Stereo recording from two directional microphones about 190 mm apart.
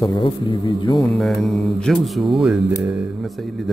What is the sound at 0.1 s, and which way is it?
A man's voice, 25° left (ahead or behind).